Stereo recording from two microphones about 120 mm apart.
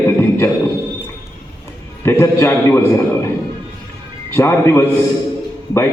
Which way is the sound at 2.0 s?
20° left (ahead or behind).